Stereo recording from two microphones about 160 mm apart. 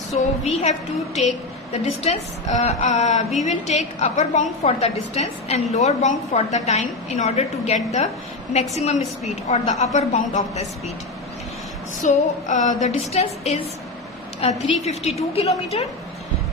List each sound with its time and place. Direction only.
0.4 s a woman's voice: 45° left (ahead or behind)
12.0 s a woman's voice: 50° left (ahead or behind)